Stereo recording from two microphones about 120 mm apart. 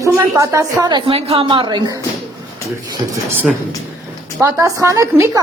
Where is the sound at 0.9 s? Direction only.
40° right (ahead or behind).